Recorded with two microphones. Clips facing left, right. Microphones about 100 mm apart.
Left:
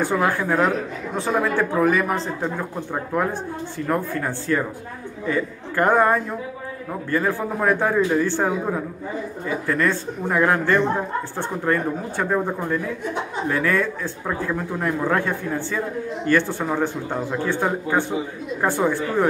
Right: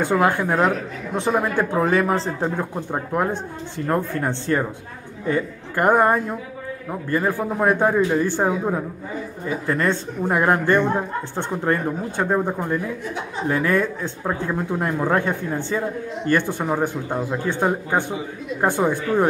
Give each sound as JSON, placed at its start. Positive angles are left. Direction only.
{"t": 0.0, "sound": "speech", "side_deg": -20}
{"t": 2.9, "sound": "speech", "side_deg": -20}
{"t": 5.8, "sound": "a man's voice", "side_deg": -15}
{"t": 9.7, "sound": "a man's voice", "side_deg": -25}